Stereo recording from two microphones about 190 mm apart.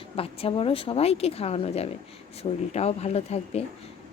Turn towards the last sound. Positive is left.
turn(degrees=35)  # may be behind; listen again after turning